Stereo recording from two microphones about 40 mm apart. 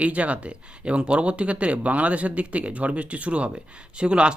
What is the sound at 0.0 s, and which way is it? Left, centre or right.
Speech, right.